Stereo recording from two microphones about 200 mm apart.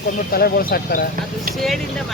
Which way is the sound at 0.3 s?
50° left (ahead or behind).